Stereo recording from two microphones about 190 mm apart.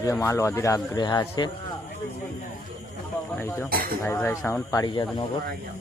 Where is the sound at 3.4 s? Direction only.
15° left (ahead or behind).